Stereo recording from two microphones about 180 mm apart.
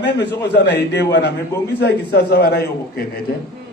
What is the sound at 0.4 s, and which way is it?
A man's voice, 70° left (ahead or behind).